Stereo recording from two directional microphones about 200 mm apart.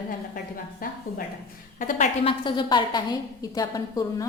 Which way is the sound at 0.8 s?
45° left (ahead or behind).